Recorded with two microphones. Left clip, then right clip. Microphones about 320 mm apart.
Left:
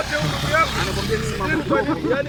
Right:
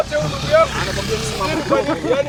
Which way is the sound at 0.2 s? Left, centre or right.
Left.